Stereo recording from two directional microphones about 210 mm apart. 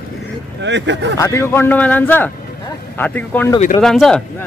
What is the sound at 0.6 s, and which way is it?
Speech, 60° right (ahead or behind).